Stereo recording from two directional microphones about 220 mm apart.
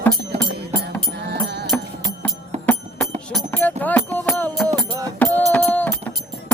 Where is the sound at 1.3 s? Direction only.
50° right (ahead or behind).